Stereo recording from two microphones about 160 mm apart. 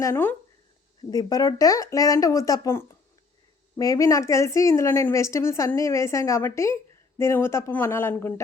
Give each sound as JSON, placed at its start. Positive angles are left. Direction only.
{"t": 0.0, "sound": "a woman's voice", "side_deg": 15}